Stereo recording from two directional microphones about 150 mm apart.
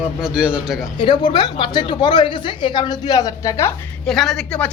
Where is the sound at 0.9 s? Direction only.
30° left (ahead or behind).